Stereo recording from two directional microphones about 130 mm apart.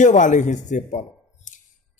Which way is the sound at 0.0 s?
70° left (ahead or behind).